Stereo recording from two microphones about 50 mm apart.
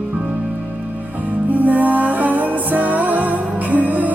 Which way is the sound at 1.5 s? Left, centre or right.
Right.